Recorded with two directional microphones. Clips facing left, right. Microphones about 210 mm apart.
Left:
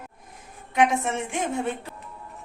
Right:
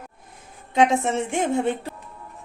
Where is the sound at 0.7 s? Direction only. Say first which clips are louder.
Right 3 dB; 25° right (ahead or behind).